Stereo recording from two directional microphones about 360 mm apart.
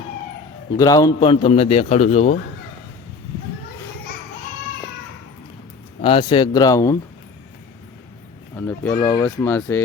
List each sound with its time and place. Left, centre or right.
0.8 s a man's voice: centre
6.0 s a man's voice: centre
8.5 s speech: centre